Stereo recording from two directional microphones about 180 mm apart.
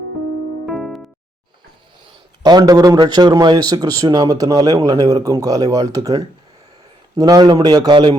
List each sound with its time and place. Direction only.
0.6 s music: centre (ahead or behind)
2.4 s a man's voice: 20° right (ahead or behind)